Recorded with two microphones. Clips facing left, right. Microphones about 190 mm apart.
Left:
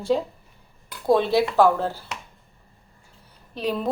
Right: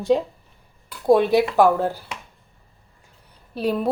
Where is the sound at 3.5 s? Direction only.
10° right (ahead or behind).